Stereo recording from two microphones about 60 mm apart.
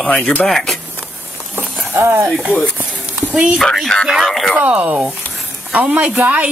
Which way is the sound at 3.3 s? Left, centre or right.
Right.